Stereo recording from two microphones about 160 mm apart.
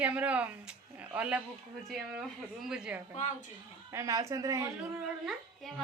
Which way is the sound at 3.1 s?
45° left (ahead or behind).